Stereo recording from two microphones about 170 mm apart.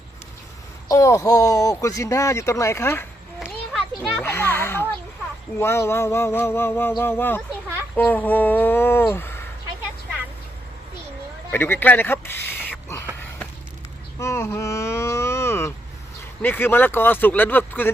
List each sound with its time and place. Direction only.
0.9 s speech: 20° left (ahead or behind)
3.4 s a sound: 5° right (ahead or behind)
4.2 s a sound: 15° left (ahead or behind)
5.5 s speech: 15° left (ahead or behind)
11.5 s speech: 10° left (ahead or behind)
14.2 s speech: 15° left (ahead or behind)